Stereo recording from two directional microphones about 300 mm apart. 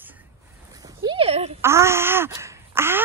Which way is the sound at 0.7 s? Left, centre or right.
Centre.